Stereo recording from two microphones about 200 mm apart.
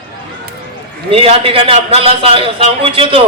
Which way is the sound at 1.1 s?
30° right (ahead or behind).